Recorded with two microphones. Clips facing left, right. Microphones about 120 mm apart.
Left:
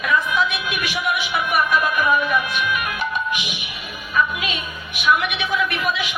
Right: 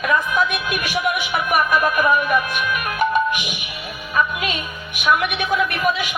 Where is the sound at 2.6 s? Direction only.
50° right (ahead or behind).